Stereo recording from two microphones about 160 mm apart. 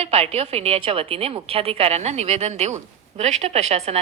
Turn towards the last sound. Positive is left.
turn(degrees=-40)  # may be behind; listen again after turning